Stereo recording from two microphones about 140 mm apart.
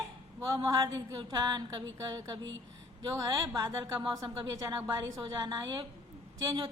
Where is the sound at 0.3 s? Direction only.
25° right (ahead or behind).